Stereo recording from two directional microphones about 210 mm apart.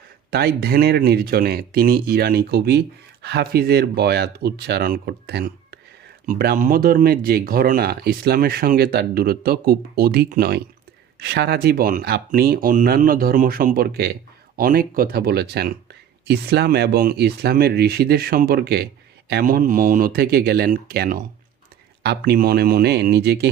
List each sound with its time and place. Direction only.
0.3 s speech: 50° right (ahead or behind)